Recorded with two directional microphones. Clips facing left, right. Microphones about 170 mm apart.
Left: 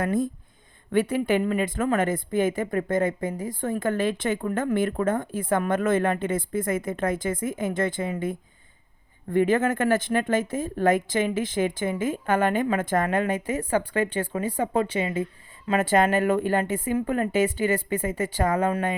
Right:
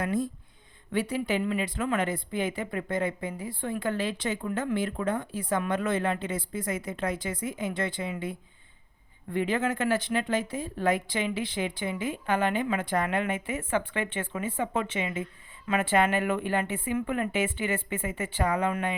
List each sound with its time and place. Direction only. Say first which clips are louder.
0.0 s speech: left 4 dB; 50° left (ahead or behind)